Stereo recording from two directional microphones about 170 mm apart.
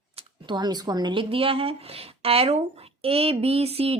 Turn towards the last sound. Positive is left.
turn(degrees=-35)  # may be behind; listen again after turning